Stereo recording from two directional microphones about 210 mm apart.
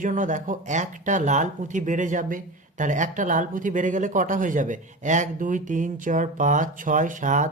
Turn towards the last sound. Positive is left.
turn(degrees=-35)  # may be behind; listen again after turning